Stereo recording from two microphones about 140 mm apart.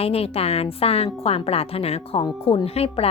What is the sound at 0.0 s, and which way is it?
Speech, 45° left (ahead or behind).